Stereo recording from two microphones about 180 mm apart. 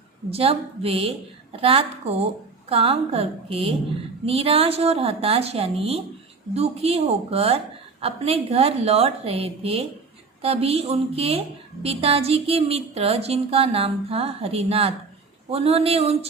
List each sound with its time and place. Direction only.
0.3 s a woman's voice: 35° right (ahead or behind)